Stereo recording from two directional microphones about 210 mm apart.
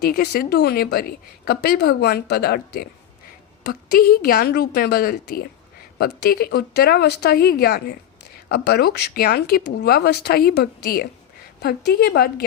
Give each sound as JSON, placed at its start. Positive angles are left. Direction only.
{"t": 0.0, "sound": "speech", "side_deg": 50}